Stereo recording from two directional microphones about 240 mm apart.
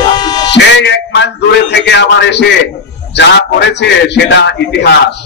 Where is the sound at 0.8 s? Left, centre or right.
Left.